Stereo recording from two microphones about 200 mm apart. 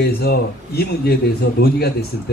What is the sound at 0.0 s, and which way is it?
A man's voice, 50° left (ahead or behind).